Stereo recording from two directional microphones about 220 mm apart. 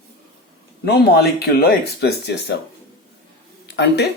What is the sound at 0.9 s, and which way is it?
Speech, 50° left (ahead or behind).